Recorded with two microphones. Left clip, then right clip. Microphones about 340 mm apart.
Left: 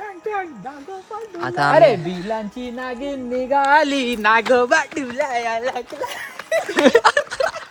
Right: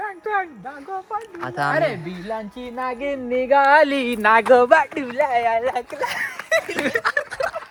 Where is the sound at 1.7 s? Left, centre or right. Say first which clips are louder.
Left 9 dB; centre.